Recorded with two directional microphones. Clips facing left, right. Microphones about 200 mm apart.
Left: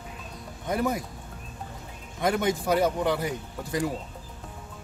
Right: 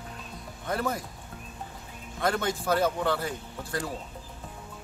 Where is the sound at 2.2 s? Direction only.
15° left (ahead or behind).